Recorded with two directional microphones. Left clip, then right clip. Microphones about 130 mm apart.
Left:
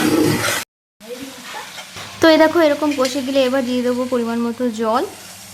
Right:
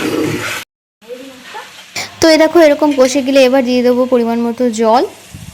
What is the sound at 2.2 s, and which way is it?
Speech, 40° right (ahead or behind).